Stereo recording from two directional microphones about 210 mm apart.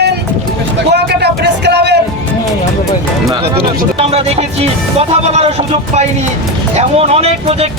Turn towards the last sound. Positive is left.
turn(degrees=-30)  # may be behind; listen again after turning